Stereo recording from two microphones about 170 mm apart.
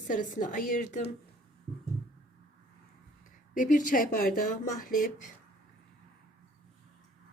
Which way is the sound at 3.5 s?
50° left (ahead or behind).